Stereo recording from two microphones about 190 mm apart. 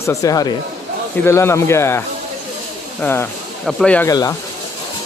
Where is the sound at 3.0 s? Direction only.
15° left (ahead or behind).